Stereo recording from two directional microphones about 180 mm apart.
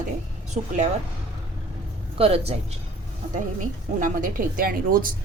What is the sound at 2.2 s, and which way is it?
Speech, 35° right (ahead or behind).